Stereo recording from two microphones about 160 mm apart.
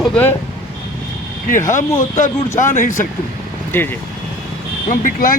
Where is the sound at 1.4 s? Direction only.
55° left (ahead or behind).